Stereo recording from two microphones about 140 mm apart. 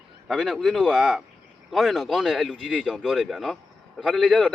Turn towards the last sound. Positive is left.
turn(degrees=0)  # may be behind; listen again after turning